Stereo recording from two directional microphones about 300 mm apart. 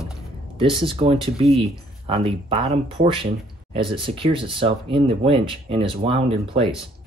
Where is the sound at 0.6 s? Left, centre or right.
Centre.